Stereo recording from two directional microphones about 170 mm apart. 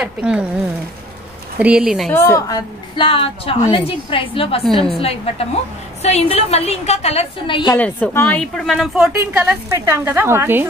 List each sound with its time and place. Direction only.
0.0 s a woman's voice: 5° right (ahead or behind)
1.6 s a woman's voice: 5° right (ahead or behind)
2.1 s a woman's voice: 20° left (ahead or behind)
7.7 s a woman's voice: 10° left (ahead or behind); by 10.7 s 15° right (ahead or behind)